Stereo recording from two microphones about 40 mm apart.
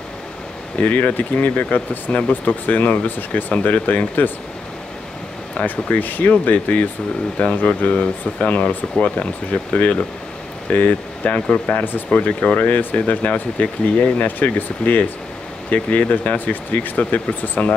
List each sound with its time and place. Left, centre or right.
0.8 s speech: left
5.6 s speech: left
11.4 s speech: left
11.7 s speech: left
12.3 s speech: left